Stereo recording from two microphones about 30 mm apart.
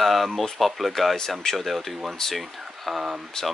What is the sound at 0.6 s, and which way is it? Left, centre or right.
Speech, centre.